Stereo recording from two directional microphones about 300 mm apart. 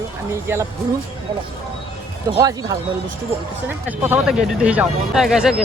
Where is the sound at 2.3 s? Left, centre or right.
Centre.